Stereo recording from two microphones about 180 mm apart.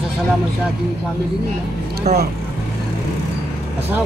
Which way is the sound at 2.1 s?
40° right (ahead or behind).